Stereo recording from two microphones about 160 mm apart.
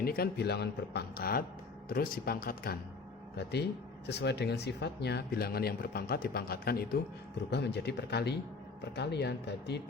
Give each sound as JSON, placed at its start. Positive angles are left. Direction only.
{"t": 0.0, "sound": "speech", "side_deg": 70}
{"t": 3.3, "sound": "speech", "side_deg": 90}
{"t": 7.5, "sound": "speech", "side_deg": 90}